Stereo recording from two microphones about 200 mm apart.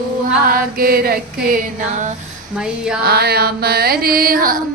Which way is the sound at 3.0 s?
50° right (ahead or behind).